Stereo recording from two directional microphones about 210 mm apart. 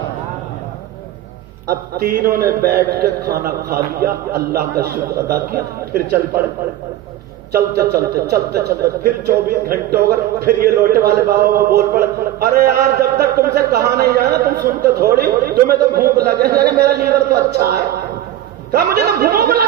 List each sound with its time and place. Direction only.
2.0 s a man's voice: 45° right (ahead or behind)
7.5 s a man's voice: 45° right (ahead or behind)